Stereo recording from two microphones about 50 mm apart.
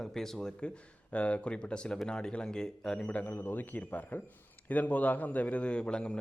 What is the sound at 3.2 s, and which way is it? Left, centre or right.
A man's voice, left.